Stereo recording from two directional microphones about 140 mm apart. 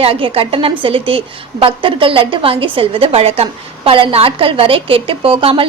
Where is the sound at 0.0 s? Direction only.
40° right (ahead or behind).